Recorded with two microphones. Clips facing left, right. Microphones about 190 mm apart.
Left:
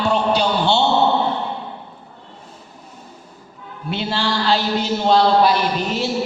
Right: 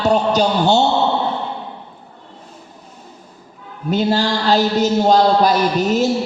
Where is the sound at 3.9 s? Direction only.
40° right (ahead or behind).